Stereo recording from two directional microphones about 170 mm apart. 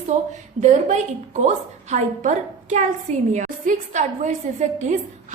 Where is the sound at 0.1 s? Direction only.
45° right (ahead or behind).